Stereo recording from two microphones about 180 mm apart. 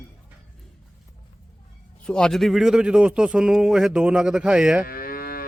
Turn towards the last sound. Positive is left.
turn(degrees=55)  # may be behind; listen again after turning